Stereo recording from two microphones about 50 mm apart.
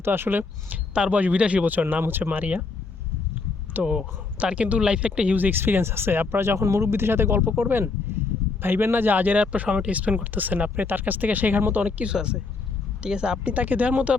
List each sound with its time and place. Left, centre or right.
0.0 s speech: right
0.7 s speech: right
1.6 s speech: right
3.8 s speech: centre
5.4 s speech: right
11.9 s speech: right
13.5 s speech: right